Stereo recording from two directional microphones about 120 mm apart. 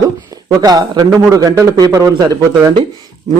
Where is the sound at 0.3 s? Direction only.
30° right (ahead or behind).